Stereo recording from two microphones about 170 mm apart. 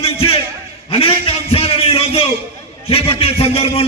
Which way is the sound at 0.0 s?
35° left (ahead or behind).